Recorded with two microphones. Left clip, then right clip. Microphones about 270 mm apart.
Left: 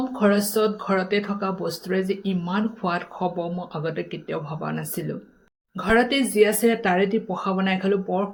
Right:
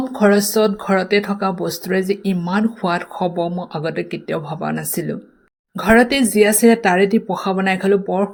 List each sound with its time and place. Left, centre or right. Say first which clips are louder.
0.1 s speech: right 8 dB; right